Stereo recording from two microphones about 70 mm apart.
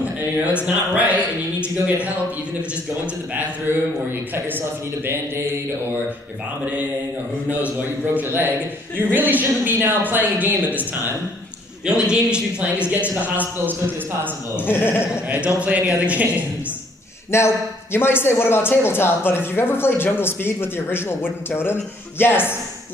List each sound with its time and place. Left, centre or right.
0.6 s a man's voice: centre
4.5 s a woman's voice: right
8.1 s a woman's voice: right
11.8 s a man's voice: centre
14.6 s speech: left
15.2 s a woman's voice: right
17.3 s speech: left